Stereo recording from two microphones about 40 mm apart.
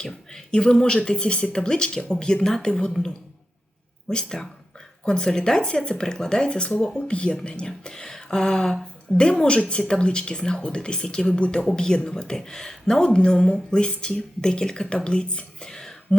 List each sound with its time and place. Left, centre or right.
0.0 s a woman's voice: left
4.1 s speech: centre